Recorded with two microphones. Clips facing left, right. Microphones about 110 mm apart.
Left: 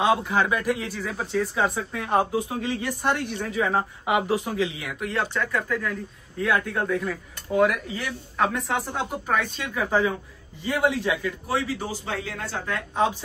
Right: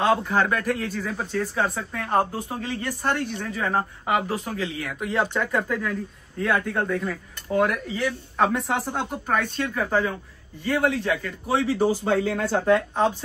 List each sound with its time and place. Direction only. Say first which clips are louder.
0.0 s a man's voice: right 1 dB; 10° left (ahead or behind)
5.0 s speech: right 2 dB; 5° right (ahead or behind)
5.9 s a man's voice: right 2 dB; centre (ahead or behind)
11.9 s a man's voice: right 9 dB; 55° right (ahead or behind)